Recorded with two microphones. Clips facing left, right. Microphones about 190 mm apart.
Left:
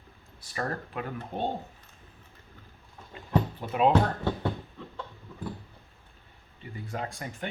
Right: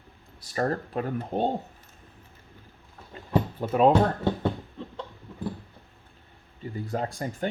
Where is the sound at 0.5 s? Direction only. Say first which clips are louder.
Right 6 dB; 35° right (ahead or behind).